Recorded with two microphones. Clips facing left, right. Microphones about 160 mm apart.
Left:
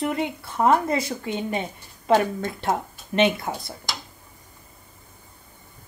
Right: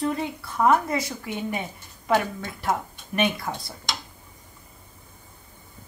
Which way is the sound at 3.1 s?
25° left (ahead or behind).